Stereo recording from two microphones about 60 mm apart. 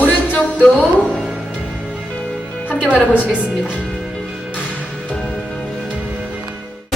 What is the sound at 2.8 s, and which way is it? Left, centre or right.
Speech, centre.